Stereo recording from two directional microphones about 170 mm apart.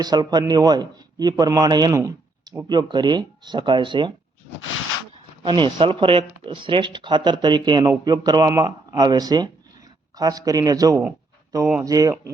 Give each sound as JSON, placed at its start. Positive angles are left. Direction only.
{"t": 0.0, "sound": "speech", "side_deg": -25}
{"t": 5.1, "sound": "a sound", "side_deg": -30}
{"t": 5.8, "sound": "speech", "side_deg": -30}